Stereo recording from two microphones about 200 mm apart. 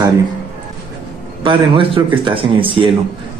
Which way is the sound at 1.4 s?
25° right (ahead or behind).